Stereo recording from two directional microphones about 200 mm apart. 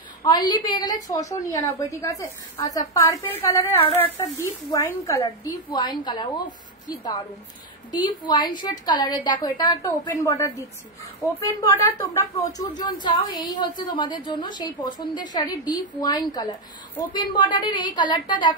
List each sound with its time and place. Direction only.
0.2 s a woman's voice: 20° left (ahead or behind)
7.9 s a woman's voice: 20° left (ahead or behind)